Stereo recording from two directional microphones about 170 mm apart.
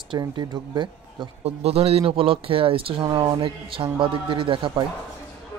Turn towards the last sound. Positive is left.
turn(degrees=-30)  # may be behind; listen again after turning